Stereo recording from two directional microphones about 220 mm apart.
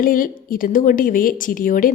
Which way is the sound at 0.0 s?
40° left (ahead or behind).